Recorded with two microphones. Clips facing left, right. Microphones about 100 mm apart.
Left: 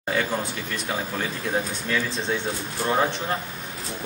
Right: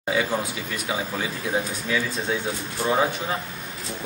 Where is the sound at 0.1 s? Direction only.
5° right (ahead or behind).